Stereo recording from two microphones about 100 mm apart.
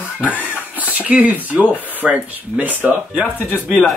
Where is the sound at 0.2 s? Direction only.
15° left (ahead or behind).